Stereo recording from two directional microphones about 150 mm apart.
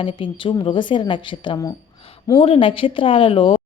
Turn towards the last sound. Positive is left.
turn(degrees=35)  # may be behind; listen again after turning